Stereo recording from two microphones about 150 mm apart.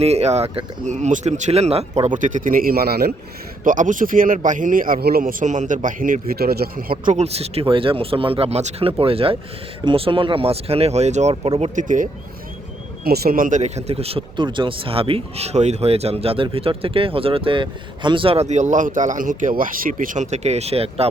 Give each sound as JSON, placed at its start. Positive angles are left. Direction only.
{"t": 0.0, "sound": "speech", "side_deg": -45}
{"t": 3.6, "sound": "a man's voice", "side_deg": -60}
{"t": 7.1, "sound": "a man's voice", "side_deg": -45}
{"t": 13.1, "sound": "speech", "side_deg": -75}